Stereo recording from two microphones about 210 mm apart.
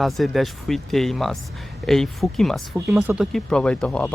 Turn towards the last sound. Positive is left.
turn(degrees=5)  # may be behind; listen again after turning